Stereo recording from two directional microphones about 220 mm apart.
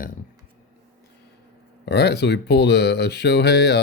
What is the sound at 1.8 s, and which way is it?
Speech, 50° left (ahead or behind).